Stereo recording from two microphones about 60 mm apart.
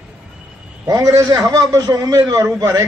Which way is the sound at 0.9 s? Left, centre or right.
Right.